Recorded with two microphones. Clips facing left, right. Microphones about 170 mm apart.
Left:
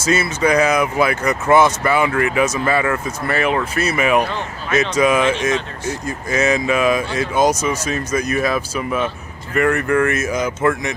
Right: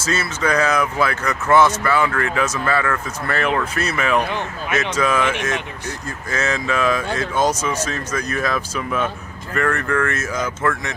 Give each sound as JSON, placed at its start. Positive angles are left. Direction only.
{"t": 0.0, "sound": "speech", "side_deg": 15}